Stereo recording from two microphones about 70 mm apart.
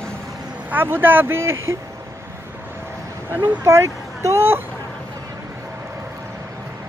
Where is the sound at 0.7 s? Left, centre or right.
Right.